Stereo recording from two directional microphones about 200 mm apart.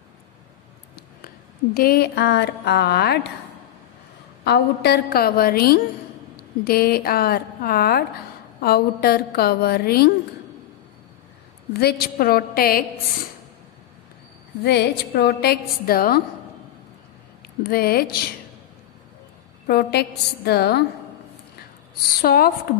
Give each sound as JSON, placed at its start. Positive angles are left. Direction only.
{"t": 0.9, "sound": "speech", "side_deg": 50}
{"t": 4.5, "sound": "a woman's voice", "side_deg": 55}
{"t": 11.7, "sound": "a woman's voice", "side_deg": 50}
{"t": 14.6, "sound": "a woman's voice", "side_deg": 55}
{"t": 17.6, "sound": "a woman's voice", "side_deg": 50}
{"t": 19.7, "sound": "a woman's voice", "side_deg": 50}
{"t": 22.2, "sound": "a woman's voice", "side_deg": 50}